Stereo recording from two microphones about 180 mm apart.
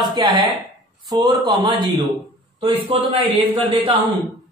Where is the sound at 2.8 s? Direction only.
30° right (ahead or behind).